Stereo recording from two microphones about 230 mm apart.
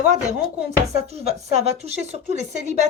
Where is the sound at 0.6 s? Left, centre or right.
Right.